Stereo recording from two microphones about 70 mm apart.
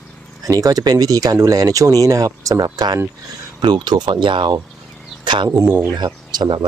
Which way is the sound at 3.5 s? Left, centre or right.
Right.